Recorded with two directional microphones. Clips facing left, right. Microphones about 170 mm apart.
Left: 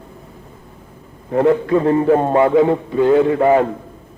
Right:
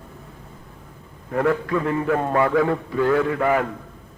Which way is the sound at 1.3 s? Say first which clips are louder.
Left 7 dB; 25° left (ahead or behind).